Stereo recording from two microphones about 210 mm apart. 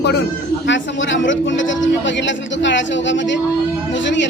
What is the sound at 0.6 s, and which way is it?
A man's voice, 60° left (ahead or behind).